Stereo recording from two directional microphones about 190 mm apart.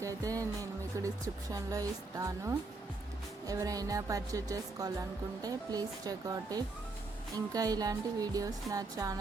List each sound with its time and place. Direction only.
0.0 s music: 15° right (ahead or behind)